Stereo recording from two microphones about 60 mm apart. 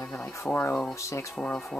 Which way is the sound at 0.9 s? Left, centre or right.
Left.